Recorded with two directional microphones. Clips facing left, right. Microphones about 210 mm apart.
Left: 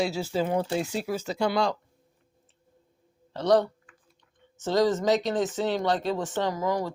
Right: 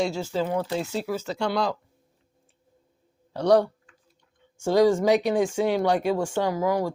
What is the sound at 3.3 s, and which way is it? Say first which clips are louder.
Speech: right 3 dB; 10° right (ahead or behind).